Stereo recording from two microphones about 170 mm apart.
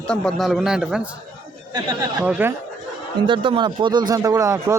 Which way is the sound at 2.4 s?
10° right (ahead or behind).